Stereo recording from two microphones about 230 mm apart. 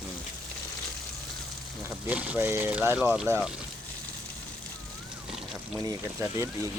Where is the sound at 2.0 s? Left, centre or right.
Centre.